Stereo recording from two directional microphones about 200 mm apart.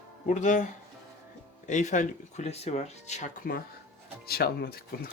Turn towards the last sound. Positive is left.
turn(degrees=50)  # may be behind; listen again after turning